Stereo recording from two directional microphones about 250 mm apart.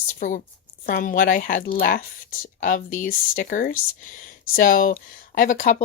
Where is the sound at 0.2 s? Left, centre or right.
Left.